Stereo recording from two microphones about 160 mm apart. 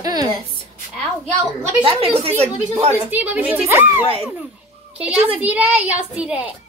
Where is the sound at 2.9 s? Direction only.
10° right (ahead or behind).